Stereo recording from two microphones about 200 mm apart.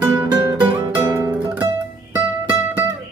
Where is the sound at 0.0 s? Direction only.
10° right (ahead or behind).